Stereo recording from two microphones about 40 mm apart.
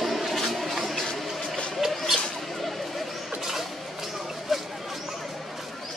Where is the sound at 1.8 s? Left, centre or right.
Centre.